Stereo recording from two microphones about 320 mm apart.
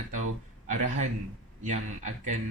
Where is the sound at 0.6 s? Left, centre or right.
Right.